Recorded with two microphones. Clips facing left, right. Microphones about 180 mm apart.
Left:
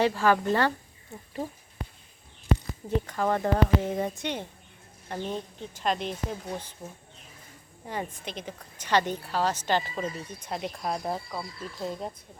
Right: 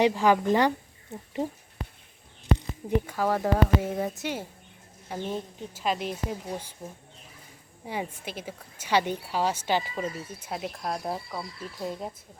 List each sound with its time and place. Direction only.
0.0 s a woman's voice: 15° right (ahead or behind)
3.1 s speech: 5° right (ahead or behind)
7.9 s a woman's voice: 10° right (ahead or behind)